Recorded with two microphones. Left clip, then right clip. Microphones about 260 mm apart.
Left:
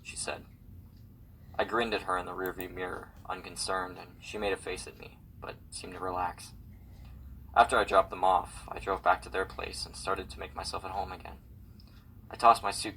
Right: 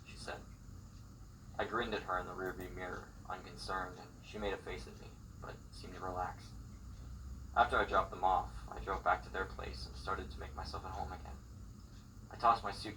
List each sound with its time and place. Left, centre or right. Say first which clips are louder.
0.3 s a sound: left 8 dB; left
1.5 s speech: left 8 dB; left
7.5 s speech: left 8 dB; left
12.4 s speech: left 9 dB; left